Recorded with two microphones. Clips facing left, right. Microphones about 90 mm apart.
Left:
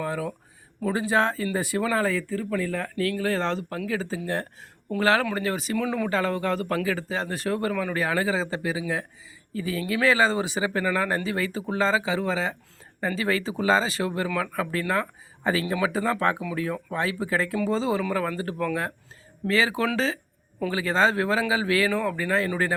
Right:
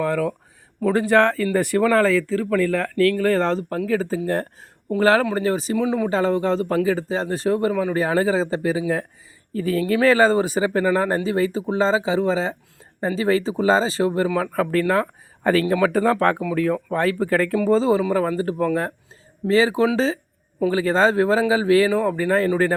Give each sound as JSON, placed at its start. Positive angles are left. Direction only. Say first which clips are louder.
{"t": 0.0, "sound": "speech", "louder": "right 7 dB", "side_deg": -60}
{"t": 2.9, "sound": "speech", "louder": "right 8 dB", "side_deg": -60}
{"t": 5.7, "sound": "speech", "louder": "right 3 dB", "side_deg": -15}
{"t": 6.1, "sound": "speech", "louder": "right 5 dB", "side_deg": -30}
{"t": 8.0, "sound": "speech", "louder": "right 5 dB", "side_deg": -35}
{"t": 14.3, "sound": "speech", "louder": "right 7 dB", "side_deg": -45}
{"t": 17.6, "sound": "speech", "louder": "right 8 dB", "side_deg": -35}